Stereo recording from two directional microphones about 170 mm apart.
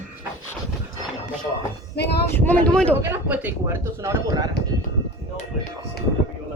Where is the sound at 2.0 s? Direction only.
75° left (ahead or behind).